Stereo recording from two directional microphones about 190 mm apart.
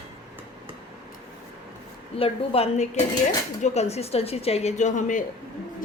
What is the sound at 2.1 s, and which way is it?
A woman's voice, 30° left (ahead or behind).